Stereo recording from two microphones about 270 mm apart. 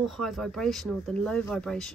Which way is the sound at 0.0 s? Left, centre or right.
Centre.